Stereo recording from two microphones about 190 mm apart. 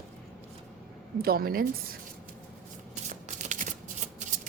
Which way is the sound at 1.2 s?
50° right (ahead or behind).